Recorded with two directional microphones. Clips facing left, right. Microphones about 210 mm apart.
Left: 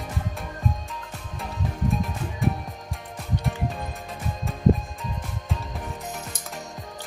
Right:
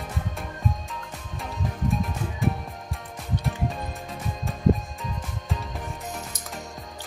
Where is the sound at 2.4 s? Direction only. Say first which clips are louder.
Left 1 dB; centre (ahead or behind).